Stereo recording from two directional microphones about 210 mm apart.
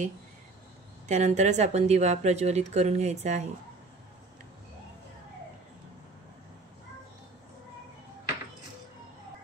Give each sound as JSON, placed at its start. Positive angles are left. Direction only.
{"t": 1.0, "sound": "speech", "side_deg": -35}